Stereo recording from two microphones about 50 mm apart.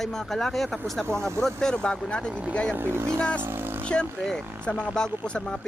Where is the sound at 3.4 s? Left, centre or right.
Right.